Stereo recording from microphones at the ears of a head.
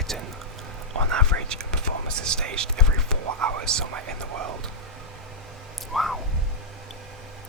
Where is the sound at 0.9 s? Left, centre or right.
Right.